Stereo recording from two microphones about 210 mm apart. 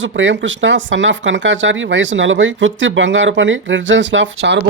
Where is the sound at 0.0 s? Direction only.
60° right (ahead or behind).